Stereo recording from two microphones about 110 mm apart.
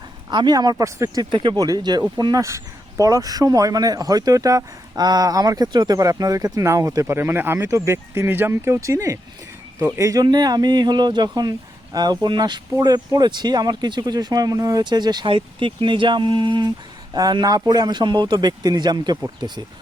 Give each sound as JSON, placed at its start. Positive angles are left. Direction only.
{"t": 0.3, "sound": "speech", "side_deg": -45}